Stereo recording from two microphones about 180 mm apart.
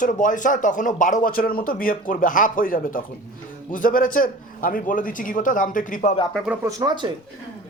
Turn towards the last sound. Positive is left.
turn(degrees=-25)  # may be behind; listen again after turning